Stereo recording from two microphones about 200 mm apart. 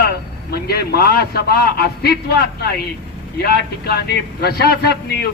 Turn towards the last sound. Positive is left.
turn(degrees=50)  # may be behind; listen again after turning